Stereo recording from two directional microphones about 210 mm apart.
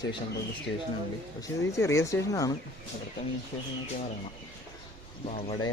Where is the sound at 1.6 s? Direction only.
15° left (ahead or behind).